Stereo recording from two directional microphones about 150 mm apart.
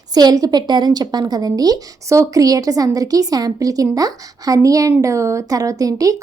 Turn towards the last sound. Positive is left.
turn(degrees=-25)  # may be behind; listen again after turning